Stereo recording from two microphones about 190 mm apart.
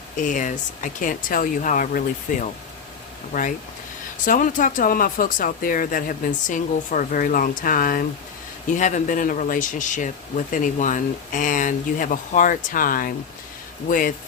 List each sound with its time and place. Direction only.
0.2 s speech: 40° left (ahead or behind)